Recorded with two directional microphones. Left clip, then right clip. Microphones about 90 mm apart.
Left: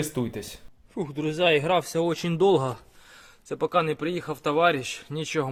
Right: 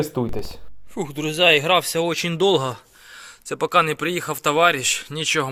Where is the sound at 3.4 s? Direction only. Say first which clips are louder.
Right 6 dB; centre (ahead or behind).